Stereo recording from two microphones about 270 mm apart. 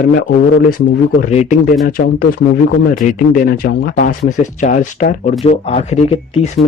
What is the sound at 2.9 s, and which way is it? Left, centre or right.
Speech, left.